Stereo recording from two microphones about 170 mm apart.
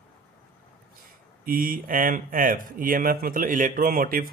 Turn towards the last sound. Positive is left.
turn(degrees=-55)  # may be behind; listen again after turning